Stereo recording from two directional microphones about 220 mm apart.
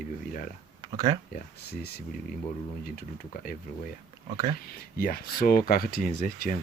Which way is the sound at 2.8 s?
40° left (ahead or behind).